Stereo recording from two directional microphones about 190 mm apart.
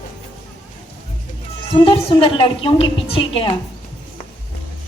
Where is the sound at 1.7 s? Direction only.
30° left (ahead or behind).